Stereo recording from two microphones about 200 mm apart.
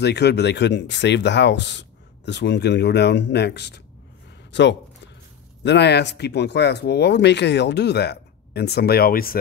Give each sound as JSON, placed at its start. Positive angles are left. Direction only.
{"t": 0.0, "sound": "speech", "side_deg": 55}
{"t": 4.5, "sound": "a sound", "side_deg": 60}
{"t": 5.6, "sound": "speech", "side_deg": 60}